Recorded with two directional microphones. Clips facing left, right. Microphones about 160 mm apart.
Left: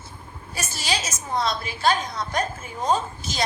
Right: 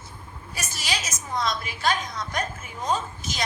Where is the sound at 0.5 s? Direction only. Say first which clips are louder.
Left 4 dB; 30° left (ahead or behind).